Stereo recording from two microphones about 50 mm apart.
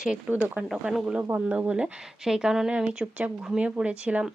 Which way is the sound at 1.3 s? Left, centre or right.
Right.